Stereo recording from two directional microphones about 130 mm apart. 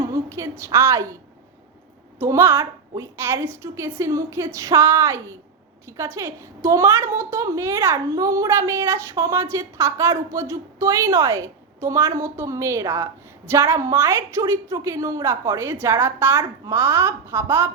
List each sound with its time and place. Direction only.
0.1 s a woman's voice: 25° right (ahead or behind)
2.1 s a woman's voice: 20° right (ahead or behind)